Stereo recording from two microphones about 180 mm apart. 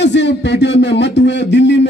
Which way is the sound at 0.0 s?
75° left (ahead or behind).